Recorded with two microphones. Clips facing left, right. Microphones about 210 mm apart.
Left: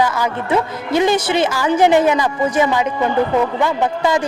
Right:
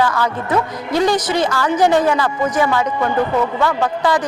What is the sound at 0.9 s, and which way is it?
Speech, 25° left (ahead or behind).